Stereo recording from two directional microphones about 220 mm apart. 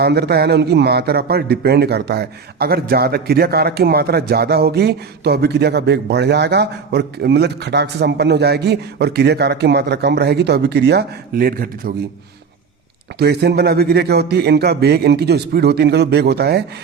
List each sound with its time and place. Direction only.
0.0 s a man's voice: 50° right (ahead or behind)
13.1 s a man's voice: 50° right (ahead or behind)